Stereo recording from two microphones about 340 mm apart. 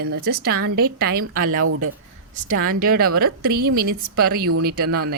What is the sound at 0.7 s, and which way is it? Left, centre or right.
Speech, right.